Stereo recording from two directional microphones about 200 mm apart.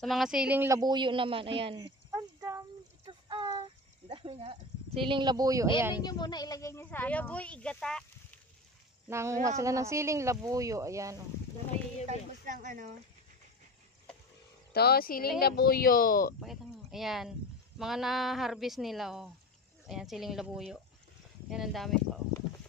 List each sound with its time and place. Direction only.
0.0 s speech: centre (ahead or behind)
3.1 s a sound: 25° right (ahead or behind)
4.1 s speech: 25° right (ahead or behind); by 6.0 s 10° right (ahead or behind)
6.0 s speech: 20° left (ahead or behind); by 8.4 s 5° left (ahead or behind)
9.1 s speech: 15° right (ahead or behind)
12.1 s speech: 40° right (ahead or behind)
14.7 s speech: 50° left (ahead or behind)
16.3 s speech: centre (ahead or behind)